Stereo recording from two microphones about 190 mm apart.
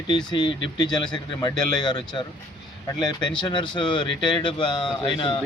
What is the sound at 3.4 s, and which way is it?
Speech, 25° left (ahead or behind).